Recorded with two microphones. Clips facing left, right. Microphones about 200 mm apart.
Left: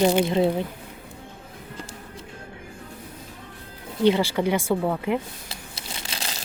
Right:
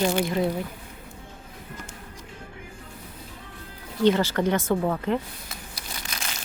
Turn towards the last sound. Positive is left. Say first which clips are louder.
# left 2 dB
turn(degrees=30)  # may be behind; listen again after turning